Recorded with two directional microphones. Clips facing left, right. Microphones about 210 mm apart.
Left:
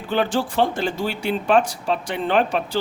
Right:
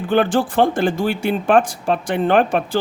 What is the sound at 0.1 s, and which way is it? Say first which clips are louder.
Speech: right 5 dB; 55° right (ahead or behind).